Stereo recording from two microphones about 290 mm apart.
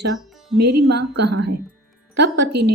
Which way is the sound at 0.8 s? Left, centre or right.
Right.